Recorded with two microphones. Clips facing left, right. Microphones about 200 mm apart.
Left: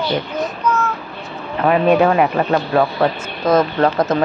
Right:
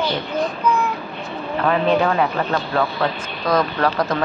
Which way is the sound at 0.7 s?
15° right (ahead or behind).